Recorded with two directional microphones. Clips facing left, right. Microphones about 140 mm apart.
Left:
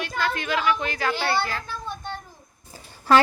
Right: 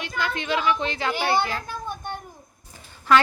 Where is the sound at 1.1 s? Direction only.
15° right (ahead or behind).